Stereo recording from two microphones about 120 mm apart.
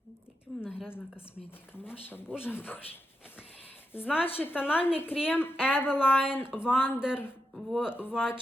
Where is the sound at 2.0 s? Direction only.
15° left (ahead or behind).